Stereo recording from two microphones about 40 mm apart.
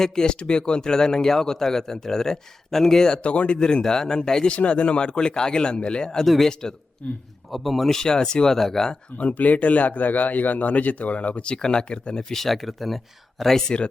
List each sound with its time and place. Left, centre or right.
0.0 s a man's voice: centre
3.2 s speech: left
6.2 s speech: centre
6.5 s a man's voice: centre
7.0 s speech: left
7.5 s speech: centre
7.9 s a man's voice: centre
8.5 s a man's voice: centre
9.1 s speech: left
11.5 s speech: centre
12.3 s speech: centre